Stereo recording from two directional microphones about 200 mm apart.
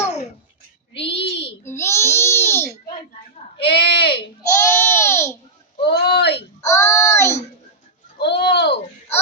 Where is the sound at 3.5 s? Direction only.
55° left (ahead or behind).